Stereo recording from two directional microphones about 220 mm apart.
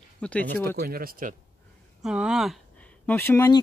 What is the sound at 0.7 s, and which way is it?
Speech, 45° right (ahead or behind).